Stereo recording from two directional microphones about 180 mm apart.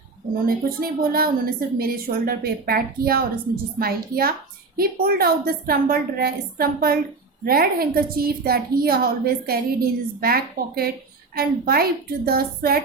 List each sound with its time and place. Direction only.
0.4 s a woman's voice: 55° right (ahead or behind)